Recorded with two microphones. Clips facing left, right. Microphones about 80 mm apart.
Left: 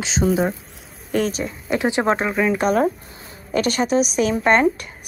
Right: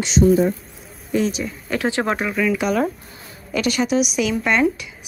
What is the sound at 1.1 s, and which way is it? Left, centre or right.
Speech, left.